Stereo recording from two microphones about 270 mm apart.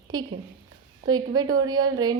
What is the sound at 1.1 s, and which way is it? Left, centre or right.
A woman's voice, centre.